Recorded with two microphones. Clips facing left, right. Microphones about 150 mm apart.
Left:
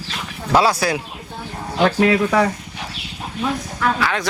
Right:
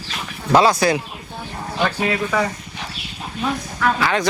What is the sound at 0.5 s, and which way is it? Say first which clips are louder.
Speech: right 2 dB; 5° left (ahead or behind).